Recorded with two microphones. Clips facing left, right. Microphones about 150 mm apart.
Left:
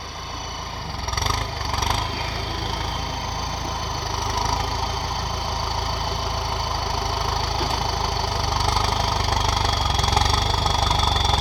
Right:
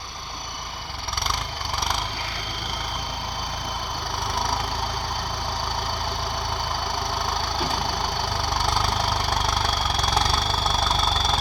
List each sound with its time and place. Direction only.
9.3 s vehicle: 35° left (ahead or behind)
10.8 s vehicle: 15° left (ahead or behind)